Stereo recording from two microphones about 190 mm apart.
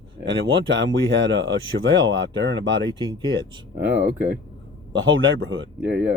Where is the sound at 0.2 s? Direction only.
75° right (ahead or behind).